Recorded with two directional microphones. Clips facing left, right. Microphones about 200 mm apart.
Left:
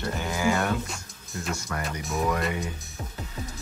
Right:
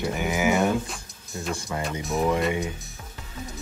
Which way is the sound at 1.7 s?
20° right (ahead or behind).